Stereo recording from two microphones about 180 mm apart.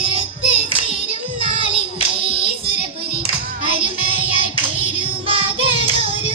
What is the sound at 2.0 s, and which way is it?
Child singing, 30° right (ahead or behind).